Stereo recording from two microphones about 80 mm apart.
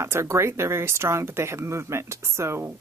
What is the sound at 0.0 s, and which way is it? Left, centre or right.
Speech, right.